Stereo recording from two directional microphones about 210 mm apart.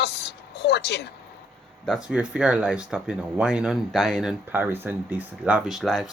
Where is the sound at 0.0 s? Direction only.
50° left (ahead or behind).